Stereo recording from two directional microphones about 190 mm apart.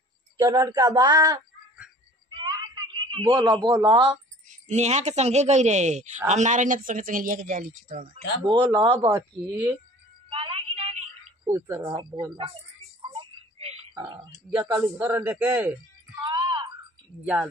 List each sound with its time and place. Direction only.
0.4 s speech: 20° right (ahead or behind)
2.2 s a sound: 25° right (ahead or behind)
3.9 s speech: 35° right (ahead or behind)
8.5 s speech: 25° right (ahead or behind)
10.3 s a sound: 30° right (ahead or behind)
11.4 s a man's voice: 15° right (ahead or behind)
13.0 s a sound: 25° right (ahead or behind)
14.5 s speech: 20° right (ahead or behind)
14.8 s a man's voice: 10° right (ahead or behind)
16.2 s wail: 25° right (ahead or behind)
17.2 s a man's voice: 5° right (ahead or behind)